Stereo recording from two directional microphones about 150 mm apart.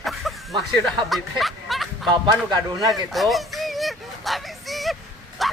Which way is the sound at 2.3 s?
25° right (ahead or behind).